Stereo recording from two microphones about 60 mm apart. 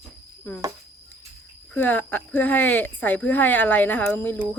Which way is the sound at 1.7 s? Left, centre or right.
Left.